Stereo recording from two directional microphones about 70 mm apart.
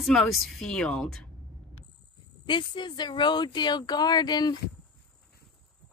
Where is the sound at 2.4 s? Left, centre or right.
Left.